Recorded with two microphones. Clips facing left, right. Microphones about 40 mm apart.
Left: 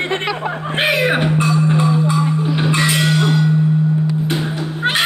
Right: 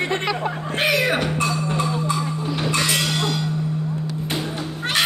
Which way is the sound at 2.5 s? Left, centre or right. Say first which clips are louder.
Left 3 dB; left.